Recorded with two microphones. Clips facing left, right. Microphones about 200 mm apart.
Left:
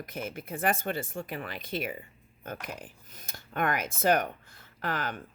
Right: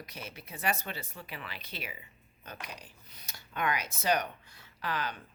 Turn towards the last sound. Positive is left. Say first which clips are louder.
# left 3 dB
turn(degrees=50)  # may be behind; listen again after turning